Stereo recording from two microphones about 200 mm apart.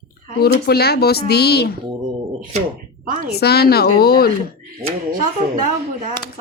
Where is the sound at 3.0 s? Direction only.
40° right (ahead or behind).